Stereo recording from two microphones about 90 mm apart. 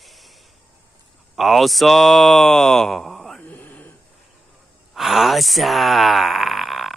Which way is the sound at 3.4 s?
20° left (ahead or behind).